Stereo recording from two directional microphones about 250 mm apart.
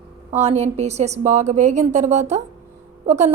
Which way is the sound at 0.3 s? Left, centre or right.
Right.